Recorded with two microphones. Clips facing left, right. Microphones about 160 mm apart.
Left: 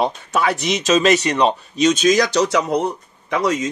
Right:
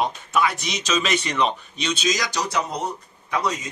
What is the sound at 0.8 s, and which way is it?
Speech, 45° left (ahead or behind).